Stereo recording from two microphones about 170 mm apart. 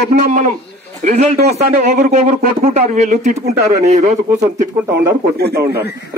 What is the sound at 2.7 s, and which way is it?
Speech, 45° right (ahead or behind).